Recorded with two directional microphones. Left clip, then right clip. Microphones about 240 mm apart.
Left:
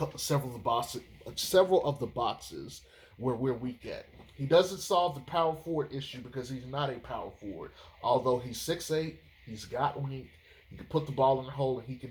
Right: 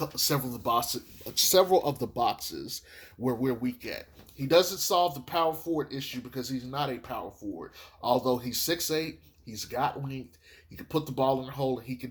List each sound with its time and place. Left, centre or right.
0.0 s speech: right